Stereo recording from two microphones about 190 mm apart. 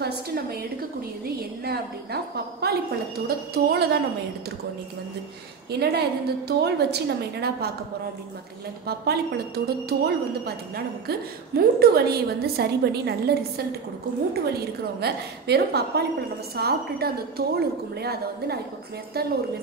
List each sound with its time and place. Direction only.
0.0 s a sound: 55° right (ahead or behind)
1.2 s a woman's voice: 55° right (ahead or behind)
5.7 s a woman's voice: 60° right (ahead or behind)
8.8 s a woman's voice: 55° right (ahead or behind)